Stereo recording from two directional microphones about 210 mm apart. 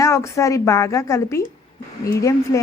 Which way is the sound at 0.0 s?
15° left (ahead or behind).